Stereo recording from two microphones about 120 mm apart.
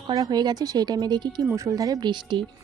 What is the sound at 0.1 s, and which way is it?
Speech, 35° right (ahead or behind).